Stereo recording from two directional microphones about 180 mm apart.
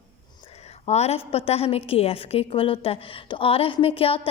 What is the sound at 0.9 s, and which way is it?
A woman's voice, 35° left (ahead or behind).